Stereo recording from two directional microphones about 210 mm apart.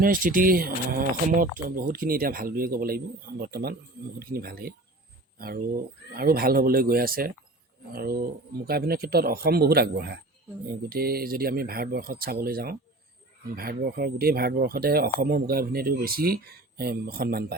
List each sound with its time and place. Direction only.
0.0 s speech: 40° right (ahead or behind)